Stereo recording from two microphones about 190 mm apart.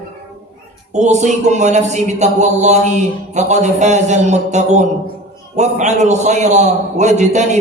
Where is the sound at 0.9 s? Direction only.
40° right (ahead or behind).